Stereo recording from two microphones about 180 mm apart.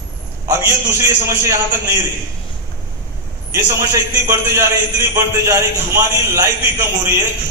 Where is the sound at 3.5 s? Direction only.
15° right (ahead or behind).